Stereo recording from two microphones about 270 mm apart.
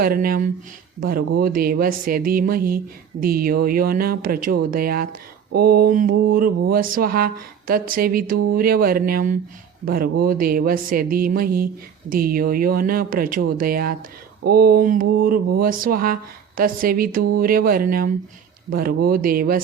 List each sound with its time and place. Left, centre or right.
0.0 s speech: right